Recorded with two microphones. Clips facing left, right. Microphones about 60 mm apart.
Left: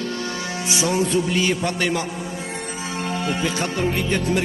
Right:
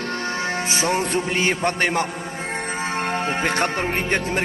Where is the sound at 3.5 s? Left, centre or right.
Right.